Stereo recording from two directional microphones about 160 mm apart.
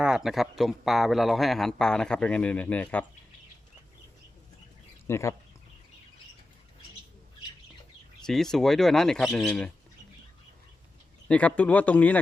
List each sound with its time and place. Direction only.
0.0 s a man's voice: 5° right (ahead or behind)
5.0 s speech: 15° left (ahead or behind)
8.3 s a man's voice: centre (ahead or behind)
11.3 s speech: 10° left (ahead or behind)